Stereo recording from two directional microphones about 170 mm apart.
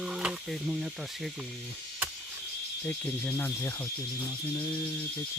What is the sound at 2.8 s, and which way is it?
Speech, 10° left (ahead or behind).